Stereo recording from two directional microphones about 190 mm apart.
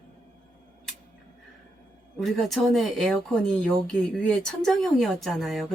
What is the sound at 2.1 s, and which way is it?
Speech, centre (ahead or behind).